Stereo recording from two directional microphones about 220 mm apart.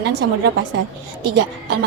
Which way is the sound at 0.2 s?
50° right (ahead or behind).